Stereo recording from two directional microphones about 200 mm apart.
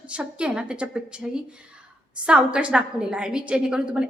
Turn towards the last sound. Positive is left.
turn(degrees=-5)  # may be behind; listen again after turning